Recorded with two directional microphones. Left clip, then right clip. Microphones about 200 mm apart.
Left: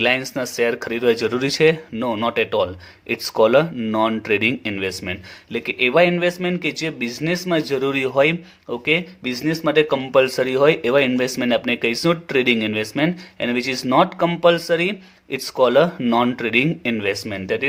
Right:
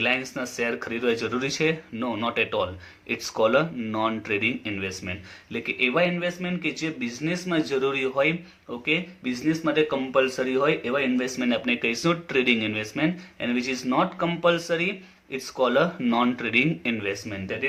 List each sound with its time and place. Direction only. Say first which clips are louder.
0.0 s speech: left 6 dB; 45° left (ahead or behind)